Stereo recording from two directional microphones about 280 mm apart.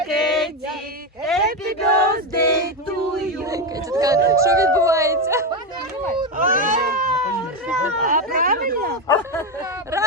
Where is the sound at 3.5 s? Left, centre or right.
Centre.